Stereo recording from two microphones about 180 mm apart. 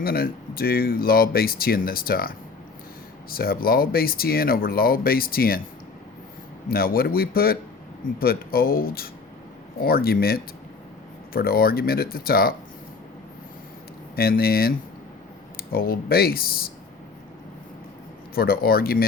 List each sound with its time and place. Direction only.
0.0 s speech: 55° left (ahead or behind)
6.7 s speech: 55° left (ahead or behind)
14.2 s speech: 55° left (ahead or behind)
18.3 s speech: 55° left (ahead or behind)